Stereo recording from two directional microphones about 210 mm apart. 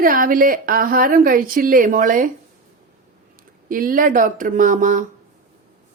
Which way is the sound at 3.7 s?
40° right (ahead or behind).